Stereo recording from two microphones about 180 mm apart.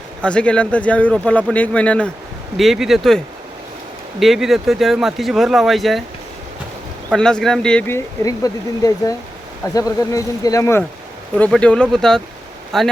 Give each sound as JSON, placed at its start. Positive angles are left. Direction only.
{"t": 0.2, "sound": "speech", "side_deg": 5}
{"t": 4.2, "sound": "speech", "side_deg": 0}
{"t": 7.1, "sound": "speech", "side_deg": 5}